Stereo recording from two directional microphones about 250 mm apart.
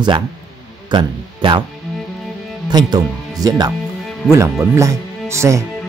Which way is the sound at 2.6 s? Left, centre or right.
Centre.